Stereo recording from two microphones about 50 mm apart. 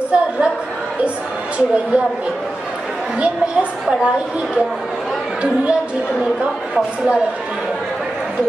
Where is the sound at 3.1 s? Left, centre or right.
Right.